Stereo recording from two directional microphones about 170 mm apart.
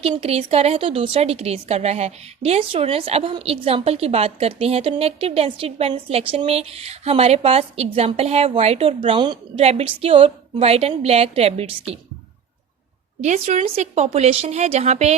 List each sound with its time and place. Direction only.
0.0 s a woman's voice: 35° right (ahead or behind)
13.2 s a woman's voice: 45° right (ahead or behind)